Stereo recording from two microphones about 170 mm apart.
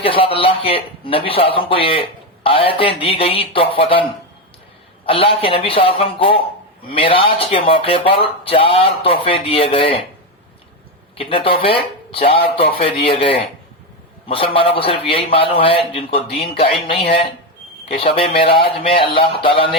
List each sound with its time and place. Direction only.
0.0 s a man's voice: 30° left (ahead or behind)
5.0 s a man's voice: 35° left (ahead or behind)
11.2 s a man's voice: 30° left (ahead or behind)